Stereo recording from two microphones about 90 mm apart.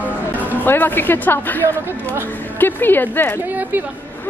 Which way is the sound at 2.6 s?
20° left (ahead or behind).